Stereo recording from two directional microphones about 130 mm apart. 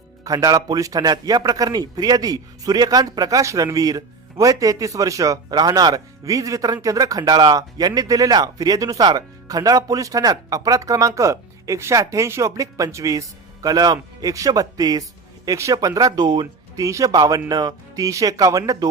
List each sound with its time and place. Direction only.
0.3 s speech: 30° right (ahead or behind)